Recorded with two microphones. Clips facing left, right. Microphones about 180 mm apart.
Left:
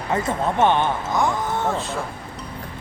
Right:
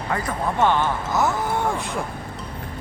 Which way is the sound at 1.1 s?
5° right (ahead or behind).